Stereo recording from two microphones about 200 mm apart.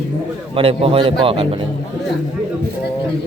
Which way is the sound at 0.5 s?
30° right (ahead or behind).